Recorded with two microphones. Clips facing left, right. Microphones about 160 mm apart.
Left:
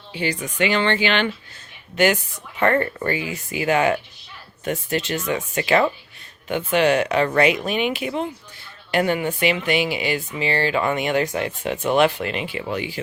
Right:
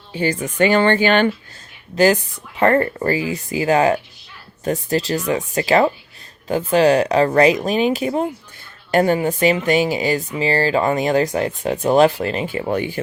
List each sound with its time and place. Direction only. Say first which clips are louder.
0.1 s speech: right 5 dB; 45° right (ahead or behind)
2.0 s speech: right 4 dB; 35° right (ahead or behind)